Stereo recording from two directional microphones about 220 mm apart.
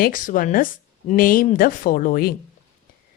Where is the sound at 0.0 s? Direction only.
40° left (ahead or behind).